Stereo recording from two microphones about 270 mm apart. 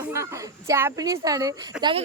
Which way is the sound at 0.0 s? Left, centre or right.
Centre.